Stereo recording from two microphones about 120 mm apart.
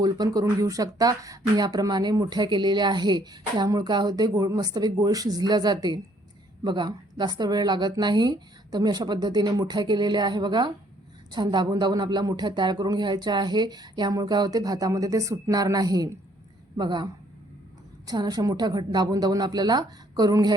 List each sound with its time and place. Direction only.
0.0 s speech: 30° right (ahead or behind)